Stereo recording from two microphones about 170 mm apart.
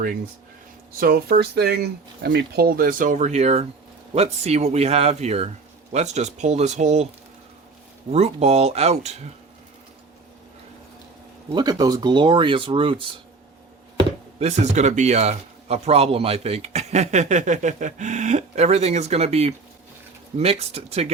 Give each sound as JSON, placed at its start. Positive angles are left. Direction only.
{"t": 0.9, "sound": "speech", "side_deg": -60}
{"t": 8.1, "sound": "speech", "side_deg": -40}
{"t": 11.5, "sound": "speech", "side_deg": -25}